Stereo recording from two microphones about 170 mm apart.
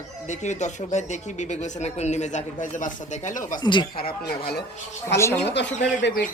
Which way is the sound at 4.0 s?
60° left (ahead or behind).